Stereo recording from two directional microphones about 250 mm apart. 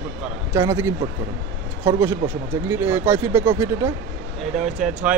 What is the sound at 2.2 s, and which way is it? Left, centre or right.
Speech, right.